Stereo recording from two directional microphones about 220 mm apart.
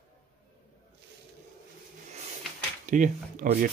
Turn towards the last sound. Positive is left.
turn(degrees=-35)  # may be behind; listen again after turning